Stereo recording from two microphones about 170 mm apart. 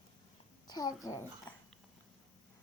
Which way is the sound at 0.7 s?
20° left (ahead or behind).